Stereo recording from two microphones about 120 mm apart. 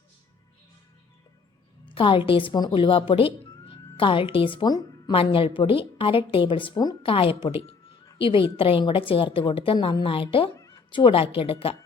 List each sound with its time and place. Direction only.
1.8 s a woman's voice: 45° left (ahead or behind)
5.1 s a woman's voice: 50° left (ahead or behind)
7.0 s a woman's voice: 50° left (ahead or behind)